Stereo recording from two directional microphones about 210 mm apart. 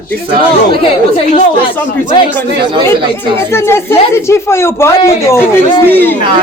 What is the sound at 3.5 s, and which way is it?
Speech, 10° left (ahead or behind).